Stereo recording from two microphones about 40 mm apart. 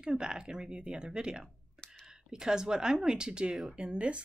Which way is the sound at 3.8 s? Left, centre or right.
Right.